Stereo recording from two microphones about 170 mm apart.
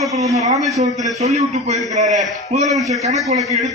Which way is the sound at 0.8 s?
40° right (ahead or behind).